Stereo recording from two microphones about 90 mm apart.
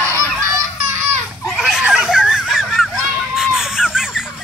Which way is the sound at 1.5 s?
5° right (ahead or behind).